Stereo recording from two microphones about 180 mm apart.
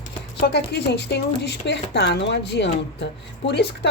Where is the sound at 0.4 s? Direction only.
65° left (ahead or behind).